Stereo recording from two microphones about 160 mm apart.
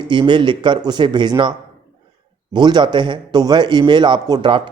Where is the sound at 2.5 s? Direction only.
25° right (ahead or behind).